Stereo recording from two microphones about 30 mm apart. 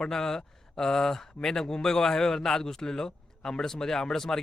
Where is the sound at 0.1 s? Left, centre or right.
Centre.